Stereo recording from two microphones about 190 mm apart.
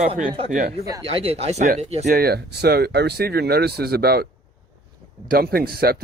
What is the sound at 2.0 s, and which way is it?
Speech, 55° right (ahead or behind).